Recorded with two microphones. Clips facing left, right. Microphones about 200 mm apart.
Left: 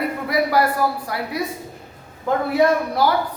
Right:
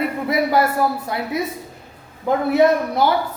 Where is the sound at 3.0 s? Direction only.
25° right (ahead or behind).